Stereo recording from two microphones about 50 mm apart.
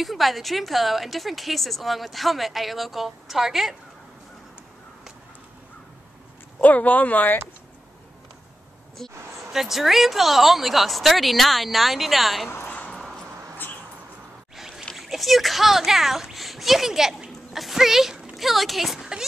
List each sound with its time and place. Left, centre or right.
0.0 s a woman's voice: centre
6.6 s speech: left
9.5 s a woman's voice: centre
12.4 s a sound: left
14.6 s a sound: centre
15.0 s a child's voice: centre